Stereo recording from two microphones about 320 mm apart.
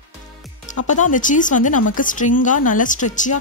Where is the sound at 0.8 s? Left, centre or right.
Left.